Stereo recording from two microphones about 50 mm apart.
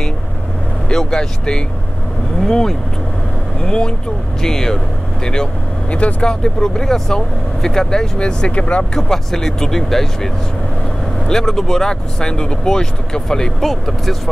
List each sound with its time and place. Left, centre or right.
0.8 s speech: centre
5.2 s vehicle: centre
6.2 s speech: centre
8.9 s speech: centre